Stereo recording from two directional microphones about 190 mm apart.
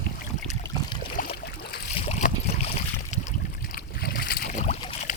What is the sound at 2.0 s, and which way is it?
Boat, 35° left (ahead or behind).